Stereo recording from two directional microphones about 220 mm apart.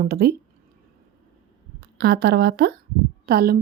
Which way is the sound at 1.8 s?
45° right (ahead or behind).